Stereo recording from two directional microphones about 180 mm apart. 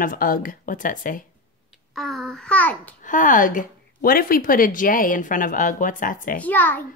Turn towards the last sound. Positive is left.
turn(degrees=10)  # may be behind; listen again after turning